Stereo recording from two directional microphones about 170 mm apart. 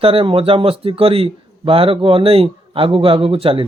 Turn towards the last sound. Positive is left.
turn(degrees=-35)  # may be behind; listen again after turning